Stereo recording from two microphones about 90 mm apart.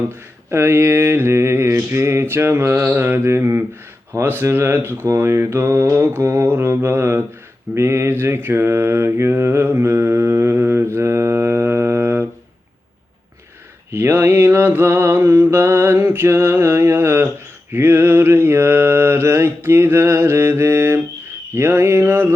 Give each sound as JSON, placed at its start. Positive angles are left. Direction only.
{"t": 0.5, "sound": "speech", "side_deg": -30}
{"t": 7.8, "sound": "mantra", "side_deg": -30}
{"t": 13.9, "sound": "mantra", "side_deg": -25}